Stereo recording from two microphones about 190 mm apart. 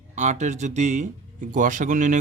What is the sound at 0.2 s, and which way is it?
Speech, 40° right (ahead or behind).